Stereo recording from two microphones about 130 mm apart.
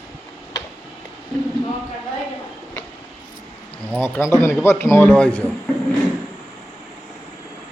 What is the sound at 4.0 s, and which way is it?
Speech, 20° left (ahead or behind).